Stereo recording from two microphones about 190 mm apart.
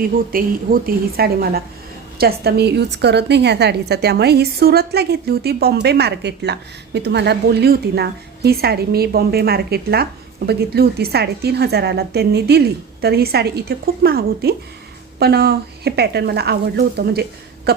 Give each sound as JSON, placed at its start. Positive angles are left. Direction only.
{"t": 0.0, "sound": "a woman's voice", "side_deg": -50}